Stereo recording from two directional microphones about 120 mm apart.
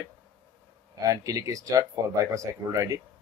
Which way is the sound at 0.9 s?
25° right (ahead or behind).